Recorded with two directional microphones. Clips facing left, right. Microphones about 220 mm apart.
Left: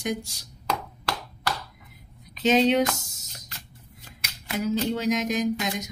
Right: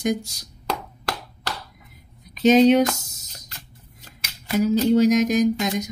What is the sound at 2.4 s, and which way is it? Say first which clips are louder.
Speech: right 6 dB; 45° right (ahead or behind).